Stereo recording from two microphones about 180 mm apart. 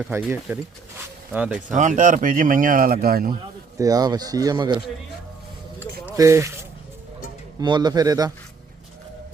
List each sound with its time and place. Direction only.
0.3 s speech: 10° right (ahead or behind)
1.7 s speech: 45° right (ahead or behind)
3.8 s speech: 20° right (ahead or behind)
6.1 s speech: 15° right (ahead or behind)